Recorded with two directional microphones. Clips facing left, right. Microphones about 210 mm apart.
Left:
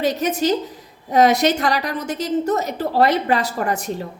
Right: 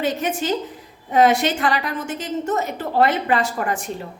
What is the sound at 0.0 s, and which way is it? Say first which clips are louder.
A woman's voice: left 3 dB; 40° left (ahead or behind).